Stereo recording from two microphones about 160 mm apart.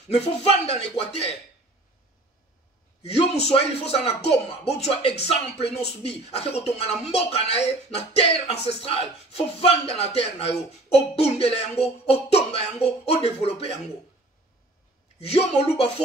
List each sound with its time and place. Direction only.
0.1 s a man's voice: 40° left (ahead or behind)
3.0 s a man's voice: 40° left (ahead or behind)
15.1 s a man's voice: 40° left (ahead or behind)